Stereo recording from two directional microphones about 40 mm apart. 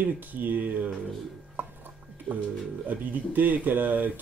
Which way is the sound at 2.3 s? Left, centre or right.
Right.